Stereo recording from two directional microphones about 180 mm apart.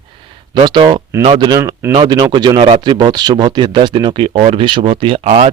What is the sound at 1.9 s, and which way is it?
Speech, 25° right (ahead or behind).